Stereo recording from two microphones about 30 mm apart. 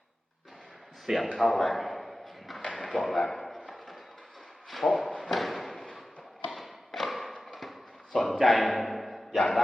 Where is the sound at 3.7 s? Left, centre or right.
Centre.